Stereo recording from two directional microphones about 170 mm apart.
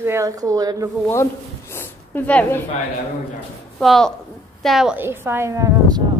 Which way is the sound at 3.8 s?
Centre (ahead or behind).